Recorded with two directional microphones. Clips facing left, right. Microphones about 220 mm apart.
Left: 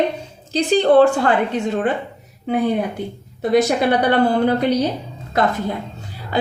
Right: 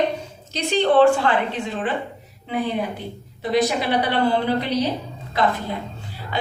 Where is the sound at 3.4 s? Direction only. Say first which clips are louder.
Left 5 dB; 50° left (ahead or behind).